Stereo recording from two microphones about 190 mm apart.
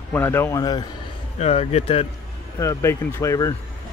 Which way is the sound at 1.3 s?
35° left (ahead or behind).